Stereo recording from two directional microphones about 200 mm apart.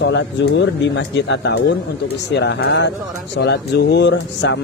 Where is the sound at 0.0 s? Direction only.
60° left (ahead or behind).